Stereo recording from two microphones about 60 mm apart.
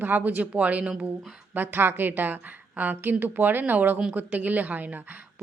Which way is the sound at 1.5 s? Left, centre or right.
Right.